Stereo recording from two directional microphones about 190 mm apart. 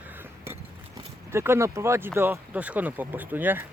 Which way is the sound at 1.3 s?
15° right (ahead or behind).